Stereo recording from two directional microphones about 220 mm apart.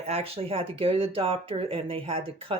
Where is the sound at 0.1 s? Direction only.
25° right (ahead or behind).